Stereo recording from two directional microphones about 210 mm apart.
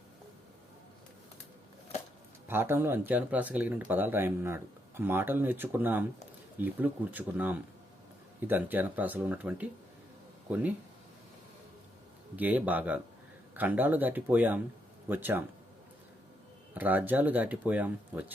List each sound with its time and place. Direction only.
2.5 s speech: 10° right (ahead or behind)
12.4 s speech: 5° right (ahead or behind)
16.7 s speech: 10° right (ahead or behind)